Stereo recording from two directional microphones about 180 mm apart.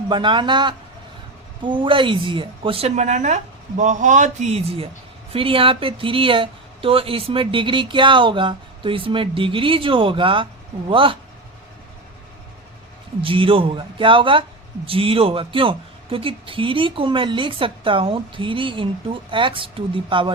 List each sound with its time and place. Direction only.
0.1 s speech: 25° right (ahead or behind)
13.2 s speech: 30° right (ahead or behind)